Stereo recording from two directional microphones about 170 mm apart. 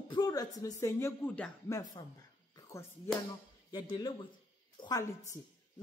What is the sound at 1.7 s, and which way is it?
Speech, 20° left (ahead or behind).